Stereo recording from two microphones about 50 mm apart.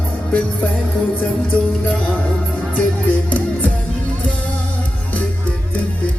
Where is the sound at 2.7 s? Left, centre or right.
Left.